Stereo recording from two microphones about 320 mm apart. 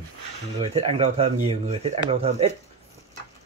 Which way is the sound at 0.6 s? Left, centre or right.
Centre.